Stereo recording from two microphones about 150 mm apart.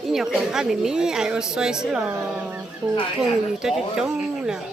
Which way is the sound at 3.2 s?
5° right (ahead or behind).